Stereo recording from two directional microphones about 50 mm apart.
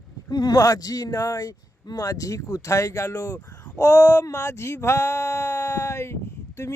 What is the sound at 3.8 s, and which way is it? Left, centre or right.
Speech, left.